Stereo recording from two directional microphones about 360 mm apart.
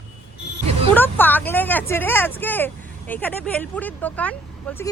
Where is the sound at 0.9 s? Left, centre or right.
Centre.